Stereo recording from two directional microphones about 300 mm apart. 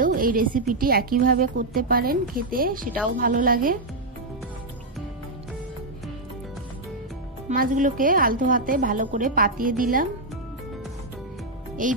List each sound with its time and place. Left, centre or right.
0.0 s a sound: right
0.7 s a woman's voice: right
7.4 s a woman's voice: right
11.8 s a woman's voice: right